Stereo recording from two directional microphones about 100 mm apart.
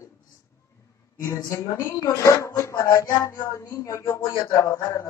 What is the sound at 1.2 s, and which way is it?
Speech, 30° left (ahead or behind).